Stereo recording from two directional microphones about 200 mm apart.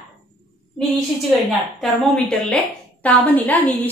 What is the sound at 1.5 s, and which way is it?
A woman's voice, centre (ahead or behind).